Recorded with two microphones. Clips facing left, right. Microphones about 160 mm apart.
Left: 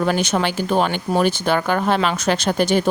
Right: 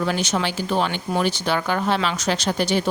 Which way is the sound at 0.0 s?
55° left (ahead or behind).